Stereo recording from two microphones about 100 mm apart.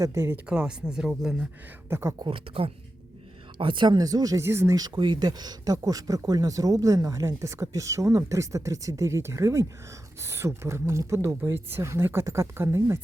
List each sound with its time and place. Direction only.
0.0 s speech: 30° right (ahead or behind)
0.4 s speech: 10° right (ahead or behind)
1.9 s speech: 25° right (ahead or behind)
2.2 s speech: 65° right (ahead or behind)
3.9 s speech: 40° right (ahead or behind)
4.4 s speech: 25° right (ahead or behind)
4.9 s speech: 50° right (ahead or behind); by 13.0 s 30° right (ahead or behind)